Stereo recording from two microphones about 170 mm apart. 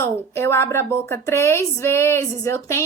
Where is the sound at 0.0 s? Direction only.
15° left (ahead or behind).